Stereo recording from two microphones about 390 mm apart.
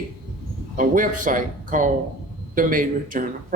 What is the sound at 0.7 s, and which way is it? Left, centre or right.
Speech, centre.